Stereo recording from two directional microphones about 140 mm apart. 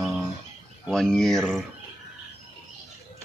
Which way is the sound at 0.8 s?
5° left (ahead or behind).